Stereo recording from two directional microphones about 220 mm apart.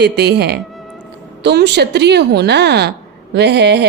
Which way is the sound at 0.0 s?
50° right (ahead or behind).